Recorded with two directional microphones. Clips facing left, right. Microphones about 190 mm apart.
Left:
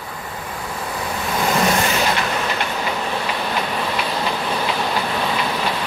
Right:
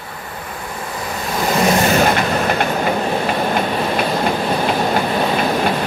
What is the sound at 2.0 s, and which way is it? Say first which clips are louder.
Train: right 5 dB; 50° right (ahead or behind).